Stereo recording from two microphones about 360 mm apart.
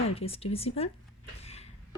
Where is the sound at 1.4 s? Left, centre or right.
Centre.